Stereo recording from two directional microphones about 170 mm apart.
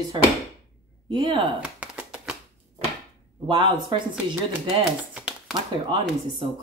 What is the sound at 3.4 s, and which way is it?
Speech, 30° right (ahead or behind).